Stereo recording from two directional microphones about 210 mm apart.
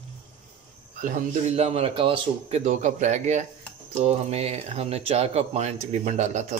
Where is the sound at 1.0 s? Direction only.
40° right (ahead or behind).